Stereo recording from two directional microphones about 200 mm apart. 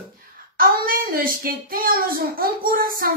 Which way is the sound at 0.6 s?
45° right (ahead or behind).